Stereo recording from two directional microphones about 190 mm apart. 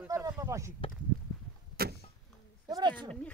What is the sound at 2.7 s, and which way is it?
Speech, 20° right (ahead or behind).